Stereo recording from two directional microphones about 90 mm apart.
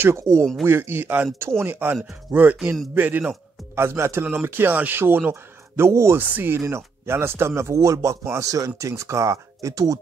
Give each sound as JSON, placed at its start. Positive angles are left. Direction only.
{"t": 0.0, "sound": "a man's voice", "side_deg": -30}